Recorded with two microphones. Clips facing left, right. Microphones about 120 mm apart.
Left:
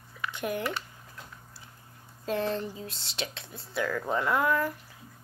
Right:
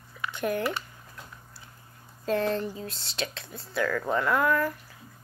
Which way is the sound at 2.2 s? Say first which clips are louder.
Right 3 dB; 15° left (ahead or behind).